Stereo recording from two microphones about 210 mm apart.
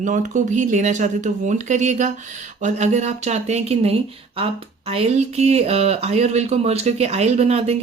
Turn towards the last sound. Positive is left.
turn(degrees=-30)  # may be behind; listen again after turning